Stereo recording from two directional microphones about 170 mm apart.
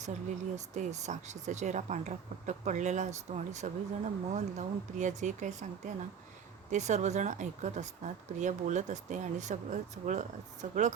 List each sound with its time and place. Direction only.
0.5 s speech: 45° right (ahead or behind)